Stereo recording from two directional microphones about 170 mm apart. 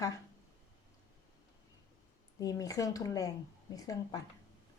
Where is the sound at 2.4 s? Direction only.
20° left (ahead or behind).